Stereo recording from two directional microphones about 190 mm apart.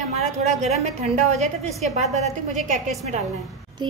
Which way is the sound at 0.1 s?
35° right (ahead or behind).